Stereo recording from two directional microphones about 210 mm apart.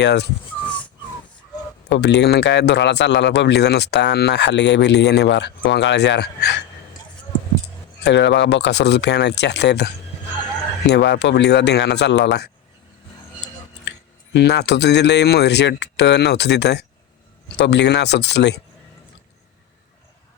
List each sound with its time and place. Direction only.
0.0 s a man's voice: 55° left (ahead or behind)
1.9 s a man's voice: 55° left (ahead or behind)
8.0 s a man's voice: 55° left (ahead or behind)
14.3 s speech: 55° left (ahead or behind)